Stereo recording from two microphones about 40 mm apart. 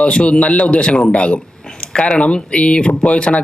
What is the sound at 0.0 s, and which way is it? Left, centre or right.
A man's voice, left.